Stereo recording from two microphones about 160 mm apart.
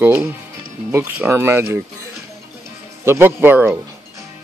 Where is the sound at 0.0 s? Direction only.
10° right (ahead or behind).